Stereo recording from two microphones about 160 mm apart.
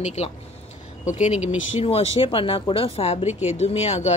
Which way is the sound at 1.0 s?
50° left (ahead or behind).